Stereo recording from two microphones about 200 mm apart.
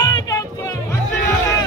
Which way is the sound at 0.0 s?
20° left (ahead or behind).